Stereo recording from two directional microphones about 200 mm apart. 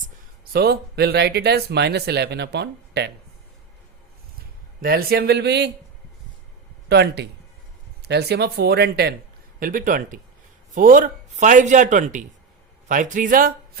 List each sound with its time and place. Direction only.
0.5 s speech: 55° right (ahead or behind)
4.8 s speech: 50° right (ahead or behind)
6.8 s speech: 55° right (ahead or behind)